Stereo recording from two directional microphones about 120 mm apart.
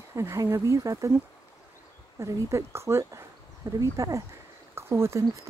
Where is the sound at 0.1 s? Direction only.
25° right (ahead or behind).